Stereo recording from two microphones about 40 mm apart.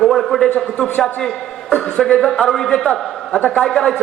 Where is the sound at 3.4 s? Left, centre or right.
Left.